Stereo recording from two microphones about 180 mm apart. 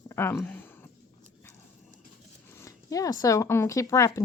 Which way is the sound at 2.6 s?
20° left (ahead or behind).